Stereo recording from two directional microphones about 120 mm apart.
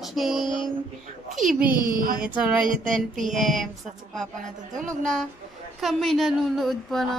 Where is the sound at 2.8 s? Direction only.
90° right.